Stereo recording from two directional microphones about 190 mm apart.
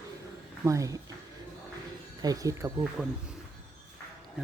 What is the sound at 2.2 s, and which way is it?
Speech, 20° right (ahead or behind).